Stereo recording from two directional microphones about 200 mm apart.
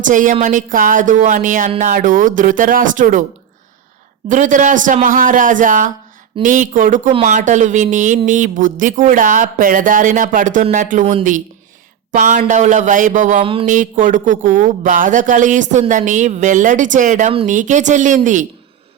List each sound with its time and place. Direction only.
0.0 s a woman's voice: 40° right (ahead or behind)
4.3 s a woman's voice: 40° right (ahead or behind)
13.4 s mantra: 25° right (ahead or behind)
13.7 s a woman's voice: 40° right (ahead or behind)